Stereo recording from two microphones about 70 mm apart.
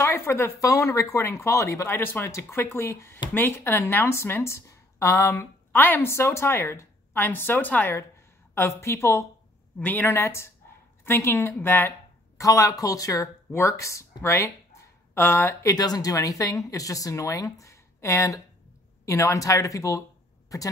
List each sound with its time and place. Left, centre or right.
0.0 s speech: left
0.6 s speech: left
1.9 s speech: left
8.5 s speech: left
9.8 s speech: left
10.1 s speech: left
12.4 s speech: left
13.5 s speech: left
15.7 s speech: left